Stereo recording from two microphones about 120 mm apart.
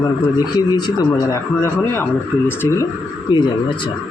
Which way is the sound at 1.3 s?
20° left (ahead or behind).